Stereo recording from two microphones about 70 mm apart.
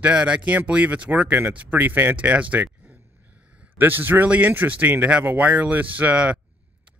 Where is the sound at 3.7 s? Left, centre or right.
Right.